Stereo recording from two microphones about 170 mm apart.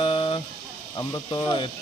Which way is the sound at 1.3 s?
25° left (ahead or behind).